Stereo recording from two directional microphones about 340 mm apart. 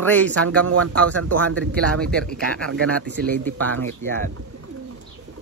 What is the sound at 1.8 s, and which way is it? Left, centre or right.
Speech, centre.